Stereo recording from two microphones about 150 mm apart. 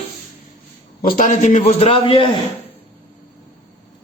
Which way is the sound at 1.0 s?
60° left (ahead or behind).